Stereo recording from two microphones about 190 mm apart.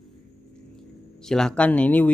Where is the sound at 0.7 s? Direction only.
5° left (ahead or behind).